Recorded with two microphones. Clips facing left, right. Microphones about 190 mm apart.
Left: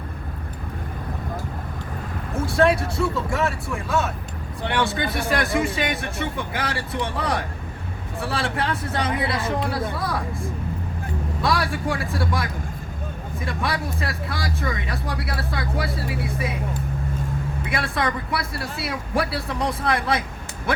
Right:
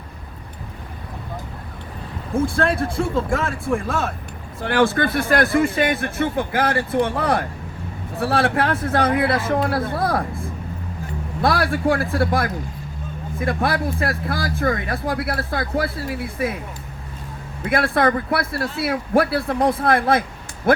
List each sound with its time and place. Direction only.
2.3 s speech: 50° right (ahead or behind)
17.6 s speech: 55° right (ahead or behind)